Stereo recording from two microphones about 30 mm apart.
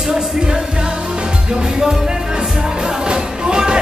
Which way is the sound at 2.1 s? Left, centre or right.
Right.